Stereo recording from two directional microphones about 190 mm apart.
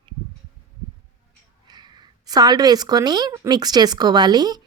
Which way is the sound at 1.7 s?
20° right (ahead or behind).